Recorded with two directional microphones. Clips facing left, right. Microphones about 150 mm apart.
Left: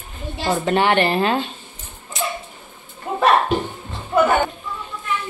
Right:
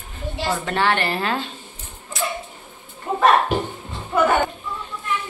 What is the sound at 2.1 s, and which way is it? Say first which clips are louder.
Dog: left 1 dB; 20° left (ahead or behind).